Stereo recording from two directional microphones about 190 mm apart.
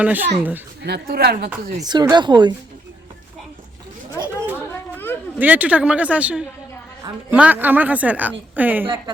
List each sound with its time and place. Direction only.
0.0 s a woman's voice: 10° right (ahead or behind)
0.9 s a woman's voice: 55° right (ahead or behind)
1.8 s speech: 20° right (ahead or behind)
4.7 s a sound: 10° left (ahead or behind)
5.4 s a woman's voice: 10° right (ahead or behind)